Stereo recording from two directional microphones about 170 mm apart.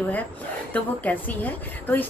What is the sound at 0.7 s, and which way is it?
A woman's voice, 10° left (ahead or behind).